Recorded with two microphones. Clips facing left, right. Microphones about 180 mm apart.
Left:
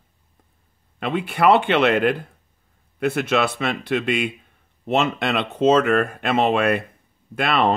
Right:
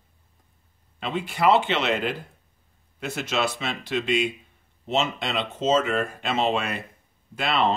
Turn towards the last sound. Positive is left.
turn(degrees=60)  # may be behind; listen again after turning